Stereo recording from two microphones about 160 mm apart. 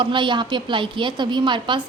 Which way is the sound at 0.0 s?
30° right (ahead or behind).